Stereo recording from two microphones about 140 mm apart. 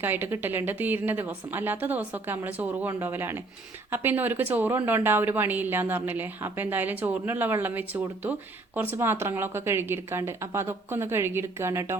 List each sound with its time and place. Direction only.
0.0 s a woman's voice: 15° right (ahead or behind)